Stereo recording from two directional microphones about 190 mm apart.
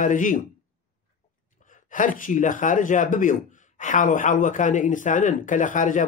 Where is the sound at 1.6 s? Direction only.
45° left (ahead or behind).